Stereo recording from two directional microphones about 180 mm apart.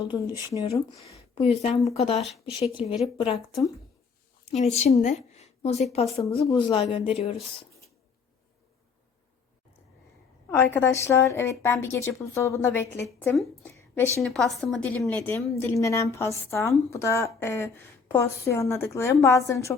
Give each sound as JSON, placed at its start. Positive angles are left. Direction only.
{"t": 0.0, "sound": "speech", "side_deg": 25}
{"t": 4.5, "sound": "a woman's voice", "side_deg": 40}
{"t": 10.5, "sound": "a woman's voice", "side_deg": 15}
{"t": 13.6, "sound": "a sound", "side_deg": 10}
{"t": 14.2, "sound": "a woman's voice", "side_deg": 5}